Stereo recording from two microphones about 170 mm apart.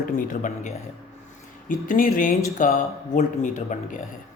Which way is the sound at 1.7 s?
50° left (ahead or behind).